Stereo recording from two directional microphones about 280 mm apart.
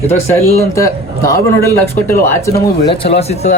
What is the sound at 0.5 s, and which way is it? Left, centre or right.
A man's voice, centre.